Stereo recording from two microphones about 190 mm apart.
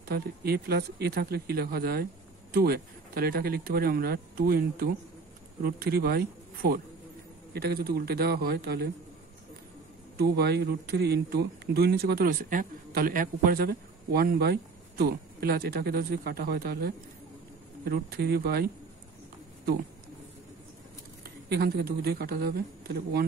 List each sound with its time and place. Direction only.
0.1 s speech: 55° right (ahead or behind)
10.1 s speech: 60° right (ahead or behind)
21.2 s a woman's voice: 55° right (ahead or behind)